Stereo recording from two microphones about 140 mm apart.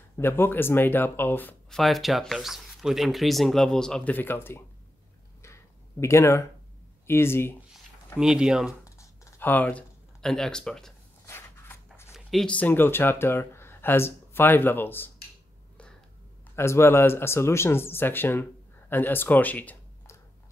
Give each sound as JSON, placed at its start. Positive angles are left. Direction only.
{"t": 0.2, "sound": "speech", "side_deg": 15}
{"t": 1.7, "sound": "speech", "side_deg": 0}
{"t": 5.4, "sound": "a sound", "side_deg": 20}
{"t": 7.1, "sound": "speech", "side_deg": 15}
{"t": 8.2, "sound": "speech", "side_deg": -5}
{"t": 8.8, "sound": "a sound", "side_deg": 20}
{"t": 11.2, "sound": "a sound", "side_deg": 20}
{"t": 12.1, "sound": "speech", "side_deg": 0}
{"t": 16.5, "sound": "speech", "side_deg": 20}